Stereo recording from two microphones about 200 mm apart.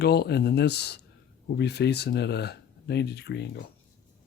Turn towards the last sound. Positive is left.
turn(degrees=60)  # may be behind; listen again after turning